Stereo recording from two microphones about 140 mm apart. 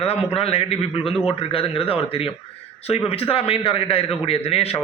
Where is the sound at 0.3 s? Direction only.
45° left (ahead or behind).